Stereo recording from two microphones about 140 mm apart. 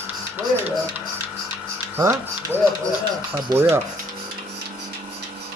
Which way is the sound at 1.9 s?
15° right (ahead or behind).